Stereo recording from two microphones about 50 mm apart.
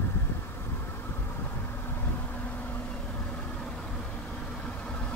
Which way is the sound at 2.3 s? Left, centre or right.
Left.